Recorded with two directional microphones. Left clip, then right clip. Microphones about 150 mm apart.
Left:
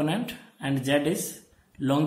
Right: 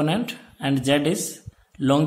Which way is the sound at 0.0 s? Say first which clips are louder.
Right 4 dB; 45° right (ahead or behind).